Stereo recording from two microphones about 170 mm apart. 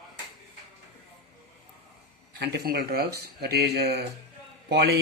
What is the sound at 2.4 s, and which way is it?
A man's voice, 70° right (ahead or behind).